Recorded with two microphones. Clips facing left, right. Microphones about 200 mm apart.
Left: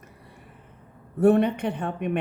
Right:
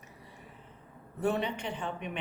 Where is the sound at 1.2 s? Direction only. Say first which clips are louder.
Left 12 dB; 55° left (ahead or behind).